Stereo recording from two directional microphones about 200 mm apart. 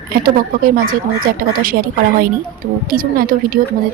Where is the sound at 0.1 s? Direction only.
45° right (ahead or behind).